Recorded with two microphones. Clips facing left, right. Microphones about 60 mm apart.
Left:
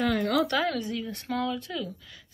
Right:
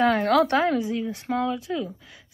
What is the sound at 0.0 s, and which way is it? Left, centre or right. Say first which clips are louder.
Speech: right 6 dB; right.